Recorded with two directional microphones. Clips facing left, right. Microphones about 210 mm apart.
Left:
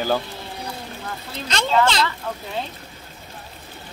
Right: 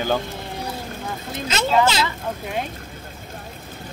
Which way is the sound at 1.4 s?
5° right (ahead or behind).